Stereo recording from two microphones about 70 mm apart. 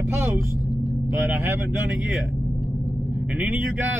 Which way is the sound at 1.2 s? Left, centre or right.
Right.